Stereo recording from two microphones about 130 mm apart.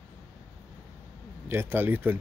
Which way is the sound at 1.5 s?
15° right (ahead or behind).